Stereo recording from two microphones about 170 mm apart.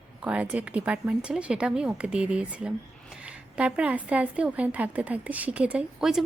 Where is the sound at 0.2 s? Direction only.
5° right (ahead or behind).